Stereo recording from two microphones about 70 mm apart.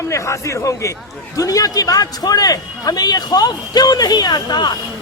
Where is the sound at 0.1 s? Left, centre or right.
Left.